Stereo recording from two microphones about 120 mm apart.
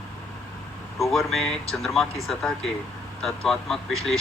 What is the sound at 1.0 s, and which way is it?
Speech, centre (ahead or behind).